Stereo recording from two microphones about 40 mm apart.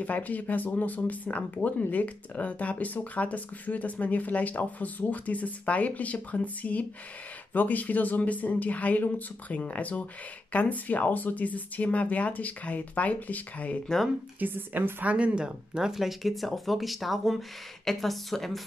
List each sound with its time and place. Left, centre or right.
0.0 s speech: left
14.4 s a woman's voice: right
15.0 s speech: right
15.4 s speech: centre
15.9 s speech: centre